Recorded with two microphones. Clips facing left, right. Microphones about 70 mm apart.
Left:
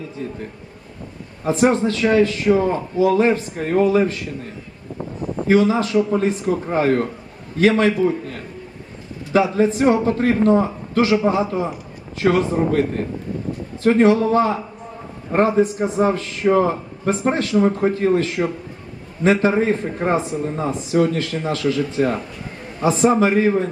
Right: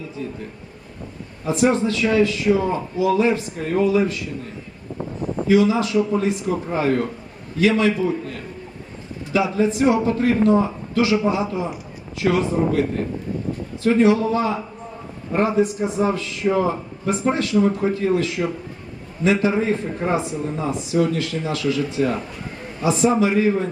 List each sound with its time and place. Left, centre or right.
0.2 s a man's voice: left
1.5 s a man's voice: left
5.5 s a man's voice: left
13.8 s a man's voice: left